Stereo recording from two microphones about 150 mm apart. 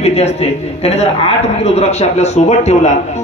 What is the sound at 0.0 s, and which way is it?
A man's voice, 45° left (ahead or behind).